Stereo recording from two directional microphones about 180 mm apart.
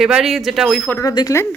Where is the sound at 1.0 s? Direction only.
20° left (ahead or behind).